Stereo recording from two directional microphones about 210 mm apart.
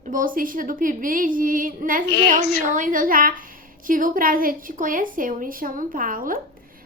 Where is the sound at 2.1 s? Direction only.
50° left (ahead or behind).